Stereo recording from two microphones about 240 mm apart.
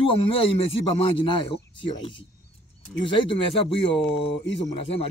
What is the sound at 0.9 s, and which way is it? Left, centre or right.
Speech, left.